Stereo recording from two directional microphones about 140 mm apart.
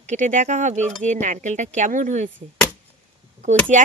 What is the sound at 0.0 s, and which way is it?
Speech, 60° right (ahead or behind).